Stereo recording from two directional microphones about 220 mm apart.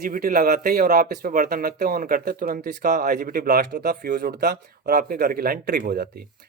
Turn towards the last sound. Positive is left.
turn(degrees=-45)  # may be behind; listen again after turning